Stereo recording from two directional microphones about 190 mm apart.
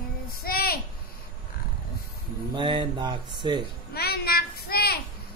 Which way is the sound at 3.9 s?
55° left (ahead or behind).